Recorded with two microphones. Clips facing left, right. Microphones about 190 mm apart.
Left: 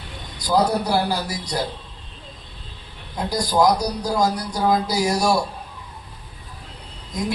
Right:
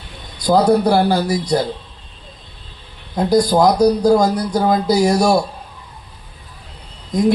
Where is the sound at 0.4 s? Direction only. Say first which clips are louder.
Right 7 dB; 55° right (ahead or behind).